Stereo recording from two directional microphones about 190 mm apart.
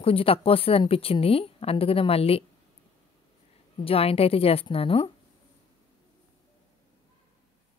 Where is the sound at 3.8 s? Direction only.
30° left (ahead or behind).